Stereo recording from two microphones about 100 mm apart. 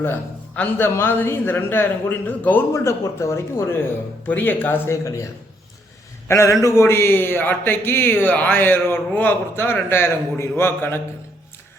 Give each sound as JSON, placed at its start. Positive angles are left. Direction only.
{"t": 0.0, "sound": "a man's voice", "side_deg": 20}
{"t": 2.7, "sound": "a man's voice", "side_deg": 30}